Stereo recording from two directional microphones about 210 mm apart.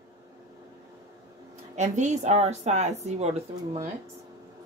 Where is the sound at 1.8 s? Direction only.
35° right (ahead or behind).